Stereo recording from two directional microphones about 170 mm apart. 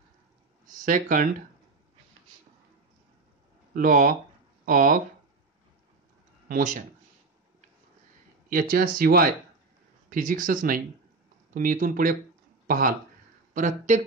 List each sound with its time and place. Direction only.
0.7 s speech: 50° right (ahead or behind)
3.7 s speech: 50° right (ahead or behind)
6.5 s speech: 50° right (ahead or behind)
8.5 s speech: 55° right (ahead or behind)